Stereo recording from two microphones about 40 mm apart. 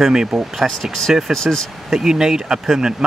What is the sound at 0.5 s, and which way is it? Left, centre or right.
Speech, centre.